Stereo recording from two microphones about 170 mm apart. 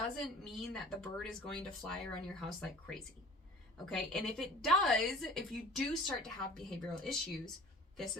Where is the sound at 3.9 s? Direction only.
Centre (ahead or behind).